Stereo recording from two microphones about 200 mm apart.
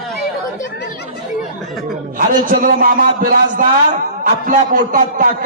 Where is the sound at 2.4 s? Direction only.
45° right (ahead or behind).